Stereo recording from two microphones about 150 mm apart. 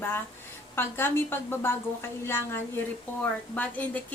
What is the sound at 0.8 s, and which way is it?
A woman's voice, 15° left (ahead or behind).